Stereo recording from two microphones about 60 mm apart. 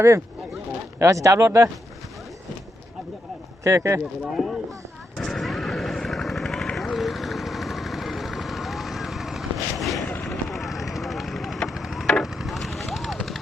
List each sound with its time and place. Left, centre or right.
0.9 s speech: right
3.6 s speech: right
4.3 s speech: centre
5.1 s vehicle: centre